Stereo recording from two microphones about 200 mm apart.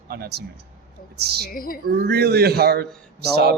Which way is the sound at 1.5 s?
45° left (ahead or behind).